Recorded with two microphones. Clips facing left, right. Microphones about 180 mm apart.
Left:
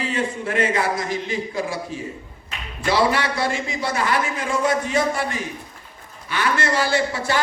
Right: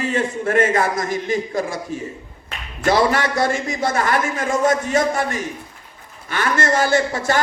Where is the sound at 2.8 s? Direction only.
45° right (ahead or behind).